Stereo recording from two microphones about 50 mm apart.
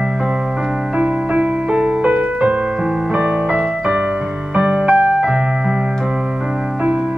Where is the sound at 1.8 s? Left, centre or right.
Centre.